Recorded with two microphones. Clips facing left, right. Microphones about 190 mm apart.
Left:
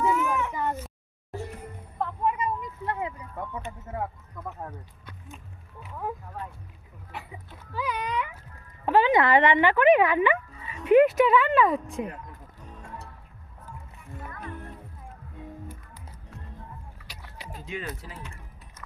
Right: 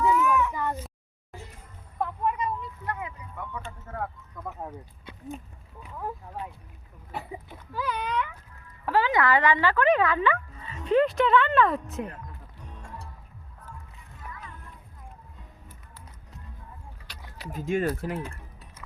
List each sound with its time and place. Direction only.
0.1 s a sound: 40° left (ahead or behind)
0.3 s a sound: 20° left (ahead or behind)
1.5 s music: 60° left (ahead or behind)
2.0 s a sound: 5° left (ahead or behind)
2.8 s a sound: 30° left (ahead or behind)
3.6 s speech: 20° left (ahead or behind)
4.4 s speech: 5° left (ahead or behind)
7.7 s speech: centre (ahead or behind)
8.9 s speech: 20° left (ahead or behind); by 12.1 s centre (ahead or behind)
12.6 s music: 5° left (ahead or behind)
14.3 s music: 55° left (ahead or behind)
17.4 s music: 5° right (ahead or behind)
17.7 s speech: 45° right (ahead or behind)